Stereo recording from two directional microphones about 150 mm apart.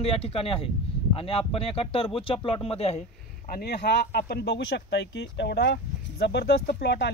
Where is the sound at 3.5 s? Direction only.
90° left.